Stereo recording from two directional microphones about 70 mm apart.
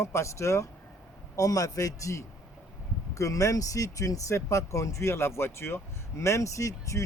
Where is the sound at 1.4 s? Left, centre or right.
Left.